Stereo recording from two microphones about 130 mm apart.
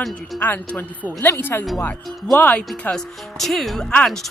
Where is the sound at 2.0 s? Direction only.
Centre (ahead or behind).